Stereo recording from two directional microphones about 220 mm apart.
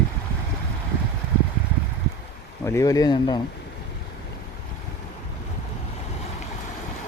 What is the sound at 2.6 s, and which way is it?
Speech, 15° left (ahead or behind).